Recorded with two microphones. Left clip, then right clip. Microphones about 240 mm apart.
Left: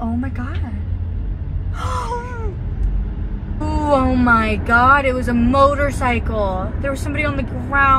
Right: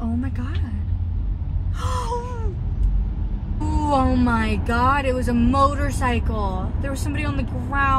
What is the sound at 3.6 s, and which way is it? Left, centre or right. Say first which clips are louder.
Speech: left 4 dB; centre.